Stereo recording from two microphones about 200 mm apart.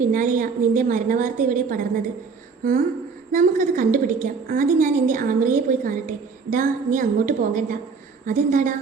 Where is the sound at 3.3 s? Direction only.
40° right (ahead or behind).